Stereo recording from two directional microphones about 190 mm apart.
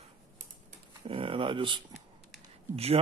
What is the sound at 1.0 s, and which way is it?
Speech, 30° right (ahead or behind).